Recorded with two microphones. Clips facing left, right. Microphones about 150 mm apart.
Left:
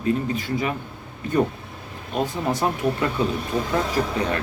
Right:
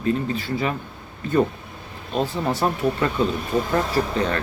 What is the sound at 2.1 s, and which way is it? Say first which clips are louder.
Speech: right 1 dB; 15° left (ahead or behind).